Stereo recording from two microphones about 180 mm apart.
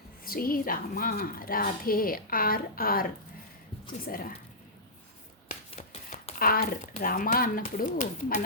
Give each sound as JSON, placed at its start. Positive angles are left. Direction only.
{"t": 0.3, "sound": "a woman's voice", "side_deg": 55}
{"t": 5.7, "sound": "a sound", "side_deg": 35}
{"t": 6.4, "sound": "a woman's voice", "side_deg": 55}